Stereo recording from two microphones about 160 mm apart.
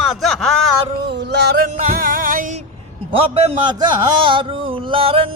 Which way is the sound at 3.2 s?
30° right (ahead or behind).